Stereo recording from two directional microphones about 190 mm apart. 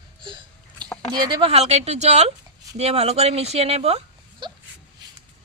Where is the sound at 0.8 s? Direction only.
5° left (ahead or behind).